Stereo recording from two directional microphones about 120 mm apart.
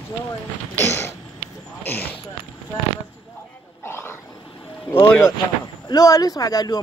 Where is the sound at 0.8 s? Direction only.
20° left (ahead or behind).